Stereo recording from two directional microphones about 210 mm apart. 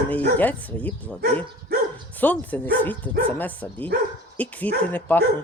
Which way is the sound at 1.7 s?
50° right (ahead or behind).